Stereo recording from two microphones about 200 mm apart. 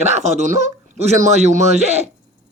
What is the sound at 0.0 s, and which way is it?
Speech, 35° right (ahead or behind).